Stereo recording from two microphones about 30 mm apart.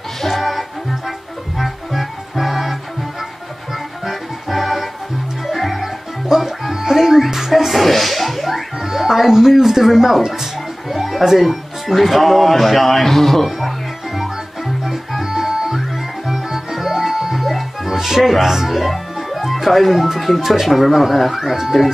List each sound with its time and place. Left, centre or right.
0.3 s music: centre
6.2 s music: centre
8.7 s speech: centre
10.3 s music: centre
11.3 s speech: centre
14.9 s music: centre
18.2 s speech: centre
19.3 s music: centre
19.7 s speech: centre